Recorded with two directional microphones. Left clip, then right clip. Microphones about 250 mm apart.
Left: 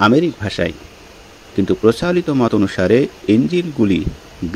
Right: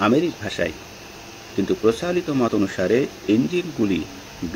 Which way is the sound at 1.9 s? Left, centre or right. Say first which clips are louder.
Left 6 dB; left.